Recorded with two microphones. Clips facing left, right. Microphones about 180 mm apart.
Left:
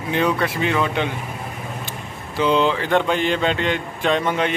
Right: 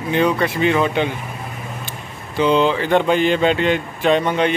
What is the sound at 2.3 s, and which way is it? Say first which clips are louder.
Speech: right 2 dB; centre (ahead or behind).